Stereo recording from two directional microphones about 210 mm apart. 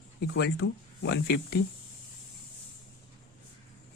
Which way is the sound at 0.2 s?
50° left (ahead or behind).